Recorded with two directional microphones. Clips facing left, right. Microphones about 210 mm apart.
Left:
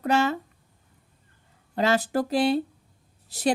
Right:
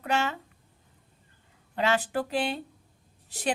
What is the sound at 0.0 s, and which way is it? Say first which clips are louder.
Speech: left 6 dB; 40° left (ahead or behind).